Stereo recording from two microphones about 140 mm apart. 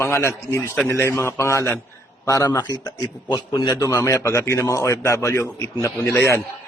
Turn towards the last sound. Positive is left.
turn(degrees=20)  # may be behind; listen again after turning